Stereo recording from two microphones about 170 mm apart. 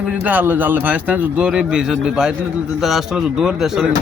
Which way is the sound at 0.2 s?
10° right (ahead or behind).